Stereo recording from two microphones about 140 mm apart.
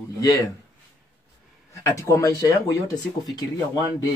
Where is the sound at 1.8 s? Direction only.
20° left (ahead or behind).